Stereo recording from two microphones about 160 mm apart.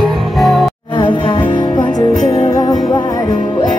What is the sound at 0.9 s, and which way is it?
Music, 30° left (ahead or behind).